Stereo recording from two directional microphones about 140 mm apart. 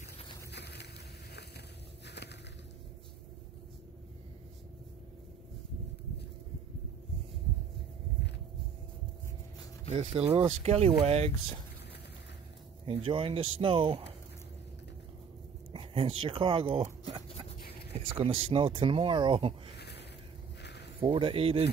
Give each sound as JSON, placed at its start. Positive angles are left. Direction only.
{"t": 9.8, "sound": "speech", "side_deg": -45}
{"t": 12.8, "sound": "speech", "side_deg": -40}
{"t": 15.7, "sound": "speech", "side_deg": -40}
{"t": 17.0, "sound": "dog", "side_deg": -40}
{"t": 17.9, "sound": "speech", "side_deg": -40}
{"t": 21.0, "sound": "speech", "side_deg": -35}